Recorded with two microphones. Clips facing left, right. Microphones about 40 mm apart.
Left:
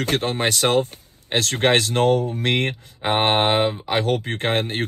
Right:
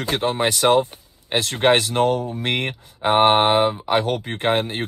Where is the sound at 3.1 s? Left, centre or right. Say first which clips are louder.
Right 3 dB; left.